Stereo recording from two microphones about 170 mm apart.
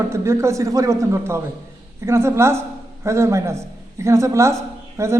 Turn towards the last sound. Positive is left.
turn(degrees=-15)  # may be behind; listen again after turning